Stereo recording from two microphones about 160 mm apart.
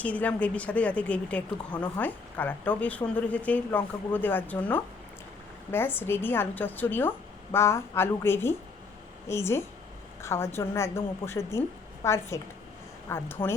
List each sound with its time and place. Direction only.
0.0 s a woman's voice: 10° left (ahead or behind)